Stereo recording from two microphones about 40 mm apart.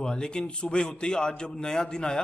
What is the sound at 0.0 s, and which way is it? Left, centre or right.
A man's voice, centre.